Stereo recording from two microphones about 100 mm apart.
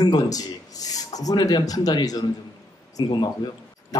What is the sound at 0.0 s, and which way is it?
A man's voice, 40° left (ahead or behind).